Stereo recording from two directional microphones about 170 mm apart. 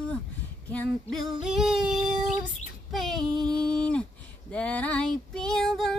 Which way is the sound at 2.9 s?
Centre (ahead or behind).